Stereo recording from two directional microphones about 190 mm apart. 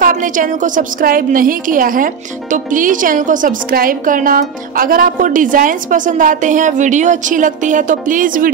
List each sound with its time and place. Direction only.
0.0 s a woman's voice: 45° right (ahead or behind)